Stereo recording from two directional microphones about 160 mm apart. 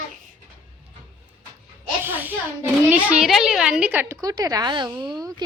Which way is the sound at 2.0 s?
10° right (ahead or behind).